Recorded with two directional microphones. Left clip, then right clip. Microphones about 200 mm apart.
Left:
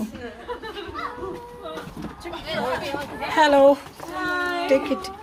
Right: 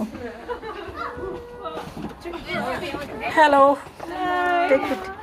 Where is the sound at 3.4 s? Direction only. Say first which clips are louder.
Right 1 dB; 20° left (ahead or behind).